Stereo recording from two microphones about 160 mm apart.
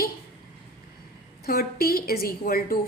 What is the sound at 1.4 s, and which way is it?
A woman's voice, 70° left (ahead or behind).